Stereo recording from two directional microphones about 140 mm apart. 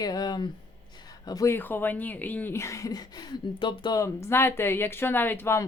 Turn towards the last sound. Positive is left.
turn(degrees=15)  # may be behind; listen again after turning